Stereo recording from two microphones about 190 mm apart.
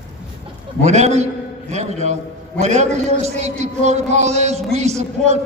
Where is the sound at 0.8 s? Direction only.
35° right (ahead or behind).